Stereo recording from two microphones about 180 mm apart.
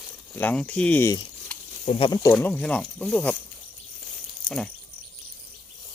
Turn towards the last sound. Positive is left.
turn(degrees=5)  # may be behind; listen again after turning